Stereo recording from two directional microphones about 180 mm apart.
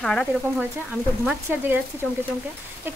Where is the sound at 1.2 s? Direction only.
10° right (ahead or behind).